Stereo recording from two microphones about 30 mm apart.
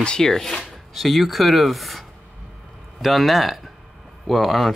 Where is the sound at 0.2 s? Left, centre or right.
Centre.